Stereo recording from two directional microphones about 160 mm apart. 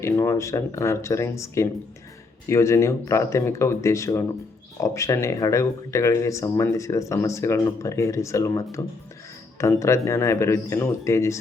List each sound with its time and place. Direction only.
0.2 s speech: 15° left (ahead or behind)